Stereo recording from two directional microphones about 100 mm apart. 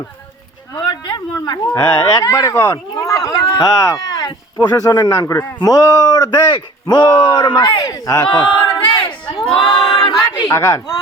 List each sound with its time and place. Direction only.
0.8 s a sound: 50° left (ahead or behind)
1.7 s speech: 35° left (ahead or behind); by 7.6 s 50° left (ahead or behind)
7.8 s speech: 40° left (ahead or behind)
8.3 s battle cry: 55° left (ahead or behind)
9.5 s a sound: 60° left (ahead or behind)
10.5 s speech: 30° left (ahead or behind)